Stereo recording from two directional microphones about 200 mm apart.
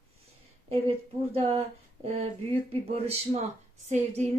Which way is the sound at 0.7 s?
30° right (ahead or behind).